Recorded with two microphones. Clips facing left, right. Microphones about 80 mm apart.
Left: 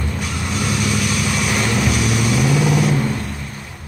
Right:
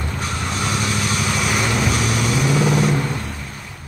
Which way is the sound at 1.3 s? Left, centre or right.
Centre.